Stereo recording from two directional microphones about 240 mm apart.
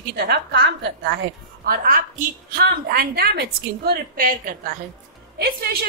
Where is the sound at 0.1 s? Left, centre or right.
Right.